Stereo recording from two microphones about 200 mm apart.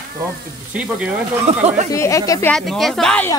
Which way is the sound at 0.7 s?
5° right (ahead or behind).